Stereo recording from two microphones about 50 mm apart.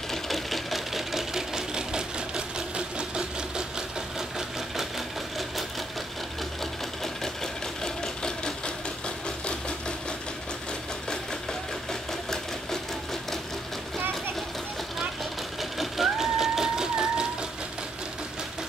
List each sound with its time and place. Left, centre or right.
0.1 s sewing machine: centre
7.8 s sewing machine: centre
9.5 s engine: centre
11.9 s sewing machine: centre
15.8 s sewing machine: centre